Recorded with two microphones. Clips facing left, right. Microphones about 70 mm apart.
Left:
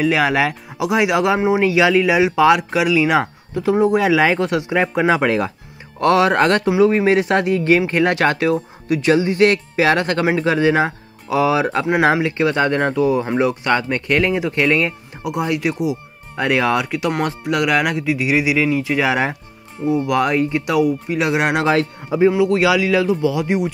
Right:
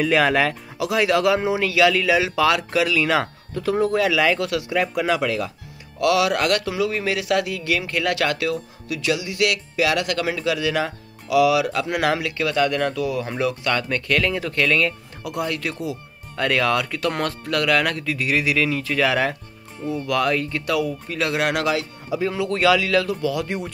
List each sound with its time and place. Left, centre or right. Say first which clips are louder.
0.0 s speech: left 2 dB; centre
0.7 s a man's voice: left 3 dB; left
21.6 s a man's voice: left 6 dB; left
22.3 s speech: left 4 dB; centre